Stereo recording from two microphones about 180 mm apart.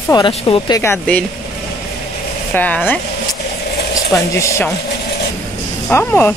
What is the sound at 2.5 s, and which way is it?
Speech, 10° left (ahead or behind).